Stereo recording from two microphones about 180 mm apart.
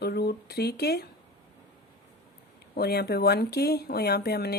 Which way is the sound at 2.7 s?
60° left (ahead or behind).